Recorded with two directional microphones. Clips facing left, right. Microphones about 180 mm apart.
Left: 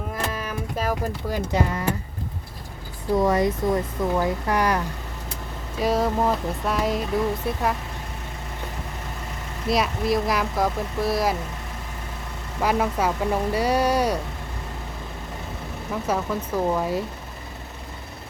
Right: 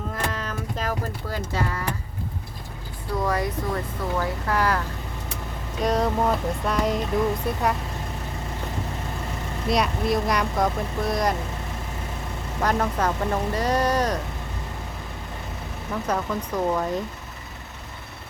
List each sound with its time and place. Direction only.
0.1 s speech: 10° left (ahead or behind)
3.2 s speech: 20° left (ahead or behind)
5.8 s speech: 5° left (ahead or behind)
9.6 s speech: centre (ahead or behind)
12.6 s speech: 10° left (ahead or behind)
15.9 s speech: 5° left (ahead or behind)